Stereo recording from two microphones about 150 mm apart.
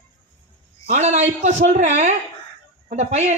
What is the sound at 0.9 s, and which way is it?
A man's voice, 50° right (ahead or behind).